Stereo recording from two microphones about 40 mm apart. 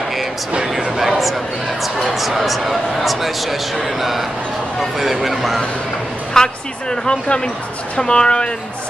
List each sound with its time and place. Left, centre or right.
0.9 s speech: centre
6.3 s speech: centre